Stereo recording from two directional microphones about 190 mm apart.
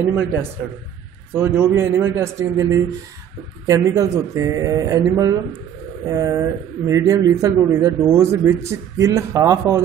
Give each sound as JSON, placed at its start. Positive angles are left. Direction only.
{"t": 0.1, "sound": "a man's voice", "side_deg": -10}